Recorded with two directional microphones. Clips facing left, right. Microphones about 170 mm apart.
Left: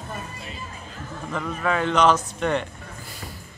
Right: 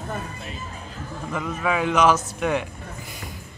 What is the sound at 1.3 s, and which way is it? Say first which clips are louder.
Speech: even; 5° right (ahead or behind).